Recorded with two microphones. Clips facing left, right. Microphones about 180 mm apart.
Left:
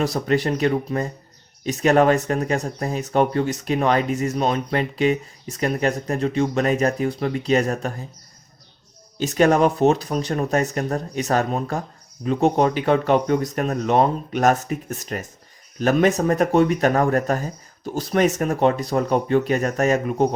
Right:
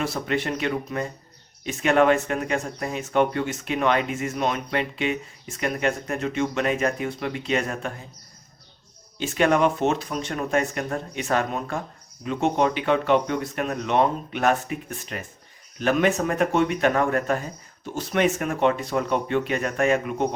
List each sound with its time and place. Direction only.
0.0 s speech: 40° left (ahead or behind)
9.1 s speech: 40° left (ahead or behind)